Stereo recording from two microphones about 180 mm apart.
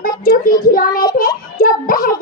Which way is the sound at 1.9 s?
50° left (ahead or behind).